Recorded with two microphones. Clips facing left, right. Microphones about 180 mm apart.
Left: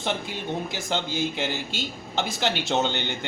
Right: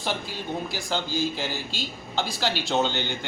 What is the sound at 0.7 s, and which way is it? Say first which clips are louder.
A woman's voice: even; 20° left (ahead or behind).